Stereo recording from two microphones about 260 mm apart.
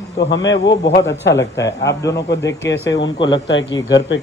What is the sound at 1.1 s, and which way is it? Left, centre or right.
A man's voice, left.